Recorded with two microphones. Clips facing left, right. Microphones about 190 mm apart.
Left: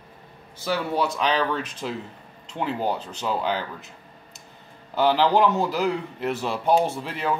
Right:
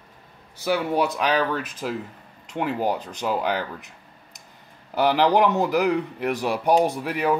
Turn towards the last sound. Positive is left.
turn(degrees=-15)  # may be behind; listen again after turning